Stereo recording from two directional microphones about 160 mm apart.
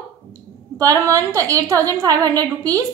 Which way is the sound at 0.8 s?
20° right (ahead or behind).